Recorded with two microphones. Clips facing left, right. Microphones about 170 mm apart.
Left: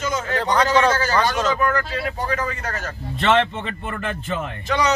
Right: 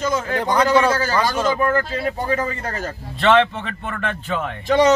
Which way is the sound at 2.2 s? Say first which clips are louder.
Right 3 dB; 25° right (ahead or behind).